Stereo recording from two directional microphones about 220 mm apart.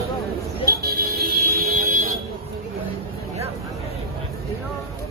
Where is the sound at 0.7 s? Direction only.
45° right (ahead or behind).